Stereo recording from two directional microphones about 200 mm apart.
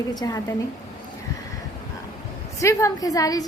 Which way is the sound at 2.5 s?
15° left (ahead or behind).